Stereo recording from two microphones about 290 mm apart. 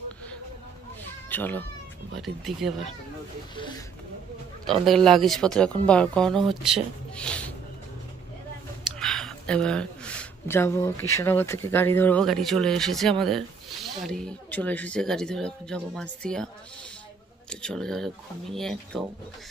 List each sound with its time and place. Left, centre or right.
1.3 s speech: centre
3.5 s speech: centre
4.6 s speech: centre
9.0 s speech: centre
17.5 s speech: centre